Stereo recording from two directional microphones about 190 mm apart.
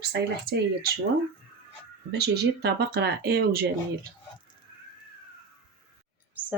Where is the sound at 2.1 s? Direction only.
60° right (ahead or behind).